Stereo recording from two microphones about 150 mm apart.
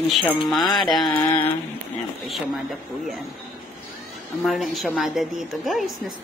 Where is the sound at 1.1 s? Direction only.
15° left (ahead or behind).